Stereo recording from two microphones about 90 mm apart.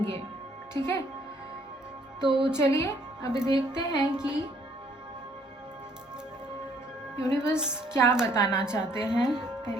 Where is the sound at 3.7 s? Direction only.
10° right (ahead or behind).